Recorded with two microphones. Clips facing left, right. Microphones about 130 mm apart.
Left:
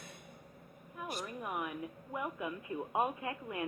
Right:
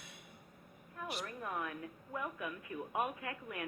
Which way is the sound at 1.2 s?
15° left (ahead or behind).